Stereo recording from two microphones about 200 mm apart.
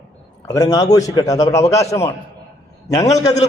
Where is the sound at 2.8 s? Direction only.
15° left (ahead or behind).